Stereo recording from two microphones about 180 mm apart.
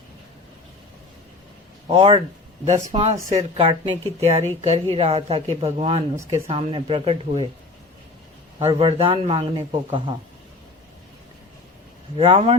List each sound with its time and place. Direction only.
1.9 s a man's voice: 30° right (ahead or behind)
8.6 s a man's voice: 35° right (ahead or behind)
12.1 s speech: 30° right (ahead or behind)